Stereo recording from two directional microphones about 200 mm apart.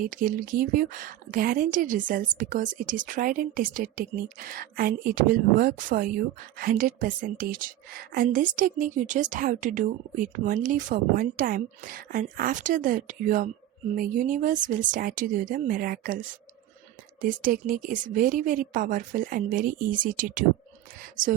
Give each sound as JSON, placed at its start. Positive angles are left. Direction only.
{"t": 0.0, "sound": "a woman's voice", "side_deg": -45}
{"t": 17.2, "sound": "a woman's voice", "side_deg": -45}